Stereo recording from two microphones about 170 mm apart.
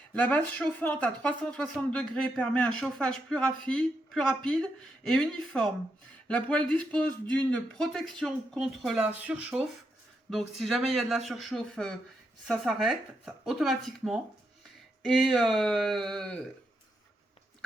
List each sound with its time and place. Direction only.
0.1 s speech: 10° left (ahead or behind)